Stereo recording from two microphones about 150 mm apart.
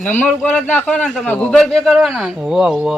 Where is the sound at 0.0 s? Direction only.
10° left (ahead or behind).